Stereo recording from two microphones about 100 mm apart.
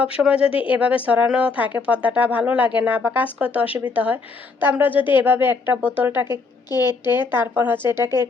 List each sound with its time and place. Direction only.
0.2 s a woman's voice: 10° right (ahead or behind)
6.2 s a woman's voice: 45° left (ahead or behind)
7.1 s a woman's voice: 20° right (ahead or behind)